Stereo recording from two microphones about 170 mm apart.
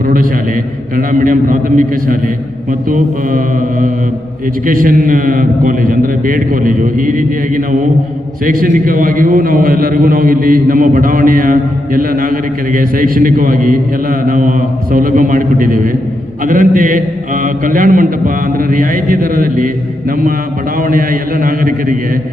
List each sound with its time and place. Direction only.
0.0 s a man's voice: 55° right (ahead or behind)